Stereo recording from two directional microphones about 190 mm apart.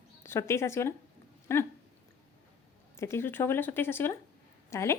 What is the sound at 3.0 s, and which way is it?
A woman's voice, 15° left (ahead or behind).